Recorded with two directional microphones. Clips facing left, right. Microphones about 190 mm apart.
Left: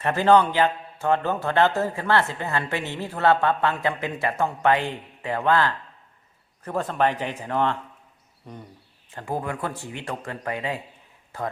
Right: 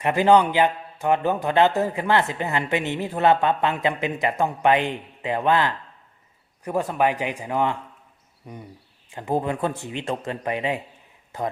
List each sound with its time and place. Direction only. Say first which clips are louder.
0.0 s a man's voice: right 1 dB; 15° right (ahead or behind)